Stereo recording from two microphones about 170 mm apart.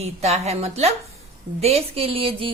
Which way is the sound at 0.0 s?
40° right (ahead or behind).